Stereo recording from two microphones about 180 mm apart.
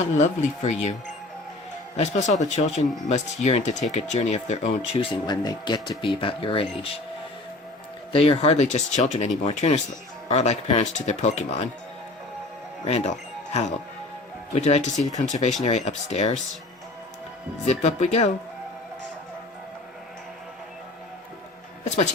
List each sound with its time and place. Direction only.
0.2 s speech: 40° left (ahead or behind)
2.0 s speech: 40° left (ahead or behind)
5.2 s speech: 25° left (ahead or behind)
8.1 s speech: 30° left (ahead or behind)
13.5 s speech: 40° left (ahead or behind)
17.7 s speech: 35° left (ahead or behind)